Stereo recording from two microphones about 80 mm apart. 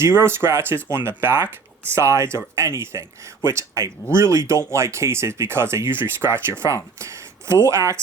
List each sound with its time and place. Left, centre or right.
0.0 s speech: right